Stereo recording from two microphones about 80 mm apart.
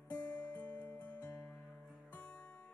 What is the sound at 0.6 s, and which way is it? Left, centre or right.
Music, centre.